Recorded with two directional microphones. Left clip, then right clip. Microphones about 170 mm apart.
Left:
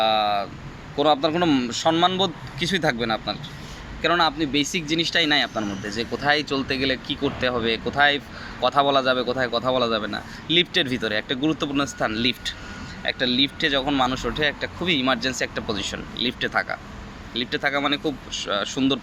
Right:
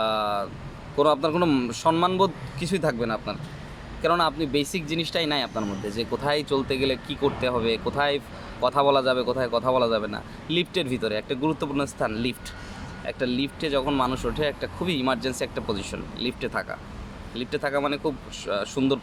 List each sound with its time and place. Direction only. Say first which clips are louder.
0.0 s vehicle: left 4 dB; 15° right (ahead or behind)
1.2 s speech: left 2 dB; 15° right (ahead or behind)